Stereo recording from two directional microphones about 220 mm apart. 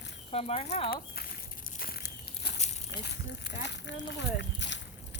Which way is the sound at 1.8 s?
45° left (ahead or behind).